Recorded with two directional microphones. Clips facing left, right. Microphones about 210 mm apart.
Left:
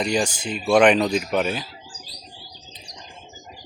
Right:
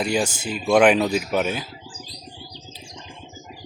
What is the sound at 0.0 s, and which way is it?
Speech, 5° right (ahead or behind).